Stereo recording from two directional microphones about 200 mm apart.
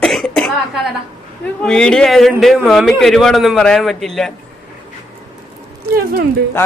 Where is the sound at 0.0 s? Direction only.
5° left (ahead or behind).